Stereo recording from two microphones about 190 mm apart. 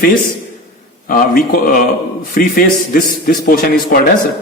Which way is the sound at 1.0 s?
50° left (ahead or behind).